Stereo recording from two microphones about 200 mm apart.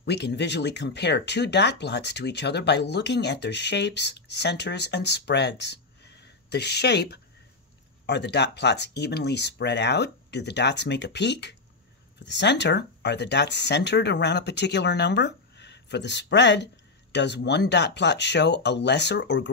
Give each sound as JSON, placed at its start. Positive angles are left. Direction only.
{"t": 0.0, "sound": "speech", "side_deg": 55}